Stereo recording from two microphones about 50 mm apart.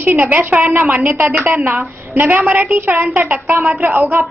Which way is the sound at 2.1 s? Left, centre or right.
Right.